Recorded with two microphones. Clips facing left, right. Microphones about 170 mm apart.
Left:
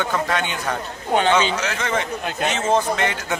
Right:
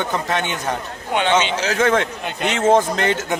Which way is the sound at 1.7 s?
60° right (ahead or behind).